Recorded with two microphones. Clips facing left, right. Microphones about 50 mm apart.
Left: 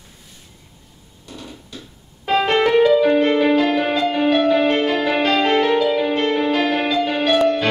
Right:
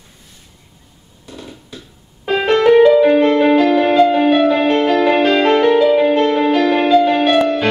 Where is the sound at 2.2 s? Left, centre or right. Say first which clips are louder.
Right 4 dB; centre.